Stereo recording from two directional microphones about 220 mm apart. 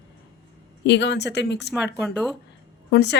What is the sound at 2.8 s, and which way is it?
Speech, 50° left (ahead or behind).